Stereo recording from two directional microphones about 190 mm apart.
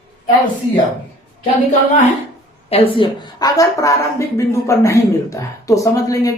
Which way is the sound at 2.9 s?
25° left (ahead or behind).